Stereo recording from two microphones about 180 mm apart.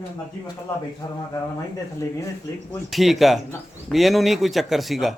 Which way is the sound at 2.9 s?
Centre (ahead or behind).